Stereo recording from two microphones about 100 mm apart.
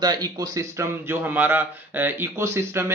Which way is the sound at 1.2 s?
20° right (ahead or behind).